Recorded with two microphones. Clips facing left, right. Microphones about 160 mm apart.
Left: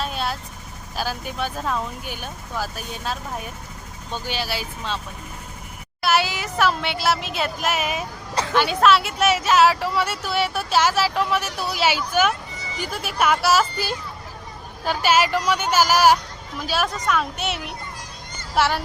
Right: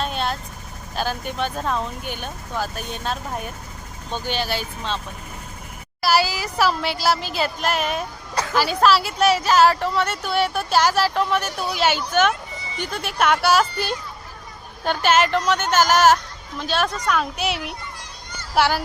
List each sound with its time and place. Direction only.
0.0 s vehicle: 5° left (ahead or behind)
0.9 s a woman's voice: 5° left (ahead or behind)
6.0 s a woman's voice: centre (ahead or behind)